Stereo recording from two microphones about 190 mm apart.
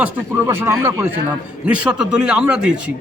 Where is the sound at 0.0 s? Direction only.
10° right (ahead or behind).